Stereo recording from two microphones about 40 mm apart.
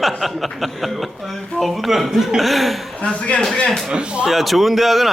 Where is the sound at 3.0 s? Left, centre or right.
Left.